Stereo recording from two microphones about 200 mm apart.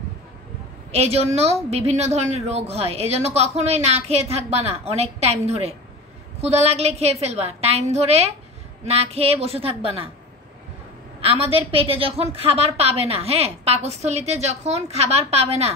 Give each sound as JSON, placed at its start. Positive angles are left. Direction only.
{"t": 0.9, "sound": "a woman's voice", "side_deg": -30}
{"t": 11.1, "sound": "a woman's voice", "side_deg": -30}